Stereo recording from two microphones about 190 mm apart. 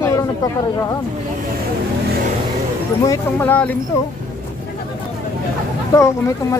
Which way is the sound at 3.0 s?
15° left (ahead or behind).